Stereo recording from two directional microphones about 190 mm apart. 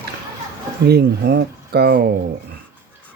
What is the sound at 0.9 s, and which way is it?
Speech, 60° right (ahead or behind).